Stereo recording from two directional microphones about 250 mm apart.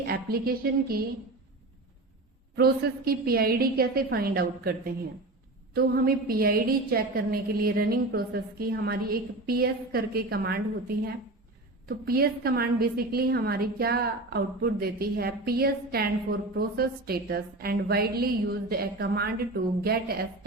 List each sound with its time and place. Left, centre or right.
0.0 s a woman's voice: right
2.6 s a woman's voice: right